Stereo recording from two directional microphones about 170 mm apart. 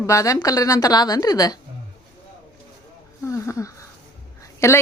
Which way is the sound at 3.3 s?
20° left (ahead or behind).